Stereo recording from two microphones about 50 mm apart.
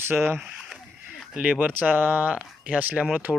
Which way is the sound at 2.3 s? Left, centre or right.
Right.